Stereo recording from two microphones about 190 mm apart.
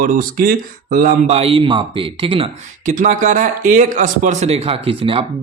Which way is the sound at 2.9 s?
45° right (ahead or behind).